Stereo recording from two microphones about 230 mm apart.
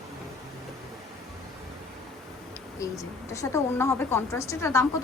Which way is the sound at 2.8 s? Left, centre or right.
Centre.